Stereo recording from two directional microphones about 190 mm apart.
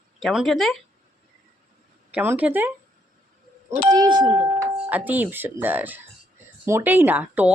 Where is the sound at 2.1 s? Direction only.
10° right (ahead or behind).